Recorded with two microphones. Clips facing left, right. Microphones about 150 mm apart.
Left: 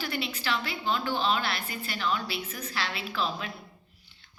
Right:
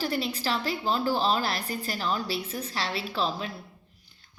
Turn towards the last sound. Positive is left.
turn(degrees=-30)  # may be behind; listen again after turning